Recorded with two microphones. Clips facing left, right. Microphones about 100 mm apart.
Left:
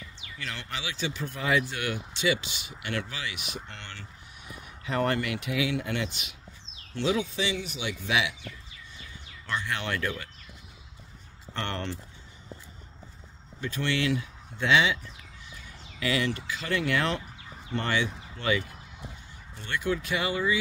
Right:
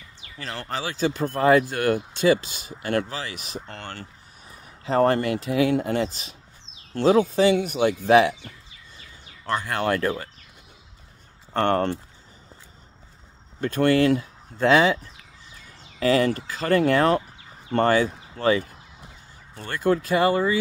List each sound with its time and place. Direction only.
0.2 s speech: 40° right (ahead or behind)
9.5 s speech: 45° right (ahead or behind)
11.5 s speech: 45° right (ahead or behind)
13.6 s speech: 50° right (ahead or behind)
16.0 s speech: 40° right (ahead or behind)